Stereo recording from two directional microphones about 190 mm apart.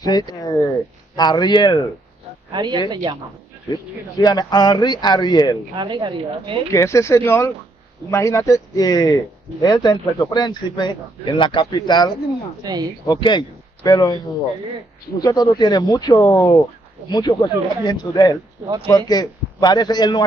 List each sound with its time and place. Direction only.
0.0 s speech: 20° left (ahead or behind)
2.5 s speech: 25° right (ahead or behind)
3.7 s speech: 20° left (ahead or behind)
5.8 s speech: 25° right (ahead or behind)
6.7 s speech: 15° left (ahead or behind)
15.1 s speech: 20° left (ahead or behind)